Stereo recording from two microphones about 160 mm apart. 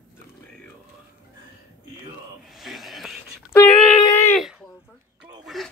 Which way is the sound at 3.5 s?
15° left (ahead or behind).